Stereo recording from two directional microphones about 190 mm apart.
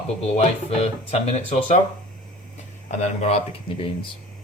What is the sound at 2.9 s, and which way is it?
Speech, 35° left (ahead or behind).